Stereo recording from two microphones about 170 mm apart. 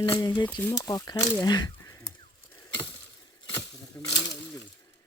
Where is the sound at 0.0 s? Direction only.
25° left (ahead or behind).